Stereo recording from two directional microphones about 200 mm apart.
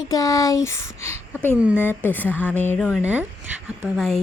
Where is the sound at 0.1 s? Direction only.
15° left (ahead or behind).